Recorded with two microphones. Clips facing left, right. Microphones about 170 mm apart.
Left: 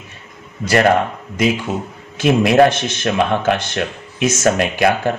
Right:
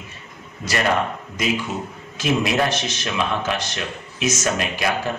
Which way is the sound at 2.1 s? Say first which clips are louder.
Left 8 dB; 55° left (ahead or behind).